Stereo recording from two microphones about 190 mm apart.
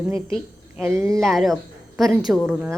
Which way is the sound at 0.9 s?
15° right (ahead or behind).